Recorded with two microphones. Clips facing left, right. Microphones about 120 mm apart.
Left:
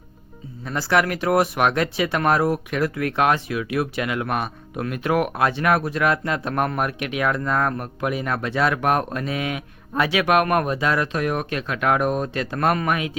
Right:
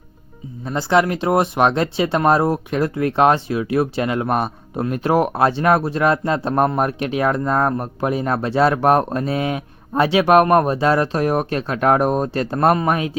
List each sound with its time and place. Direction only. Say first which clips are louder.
0.6 s speech: right 4 dB; 25° right (ahead or behind)